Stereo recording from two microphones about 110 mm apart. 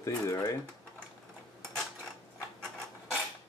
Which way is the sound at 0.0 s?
30° left (ahead or behind).